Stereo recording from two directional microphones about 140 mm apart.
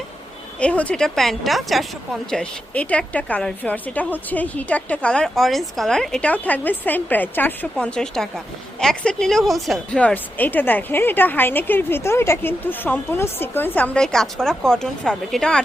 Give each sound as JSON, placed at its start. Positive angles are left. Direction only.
{"t": 0.6, "sound": "a woman's voice", "side_deg": 10}